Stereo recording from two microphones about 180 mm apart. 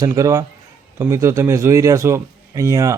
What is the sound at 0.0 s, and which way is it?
A man's voice, 20° right (ahead or behind).